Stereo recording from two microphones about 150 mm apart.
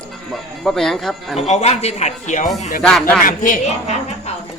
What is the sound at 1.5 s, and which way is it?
Speech, 45° left (ahead or behind).